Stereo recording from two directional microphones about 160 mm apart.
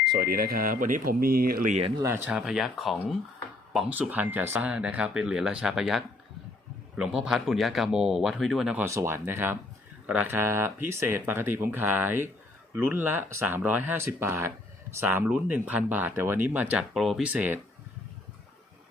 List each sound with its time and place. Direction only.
0.1 s speech: 70° right (ahead or behind)
2.0 s speech: 15° right (ahead or behind)
2.3 s speech: 5° right (ahead or behind)
8.8 s speech: 15° right (ahead or behind)